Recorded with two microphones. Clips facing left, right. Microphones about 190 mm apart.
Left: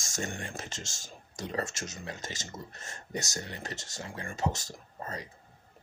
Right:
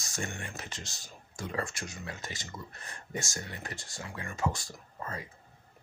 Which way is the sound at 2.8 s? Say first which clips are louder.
Left 1 dB; 40° left (ahead or behind).